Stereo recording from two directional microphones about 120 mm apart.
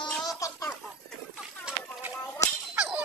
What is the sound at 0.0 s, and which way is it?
Music, 30° left (ahead or behind).